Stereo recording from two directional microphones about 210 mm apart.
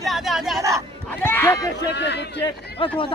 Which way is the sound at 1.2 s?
10° left (ahead or behind).